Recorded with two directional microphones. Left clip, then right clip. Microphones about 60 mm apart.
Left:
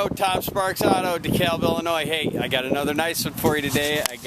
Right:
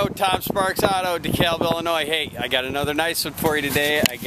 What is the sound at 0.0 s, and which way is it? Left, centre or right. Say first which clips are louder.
Speech: right 1 dB; centre.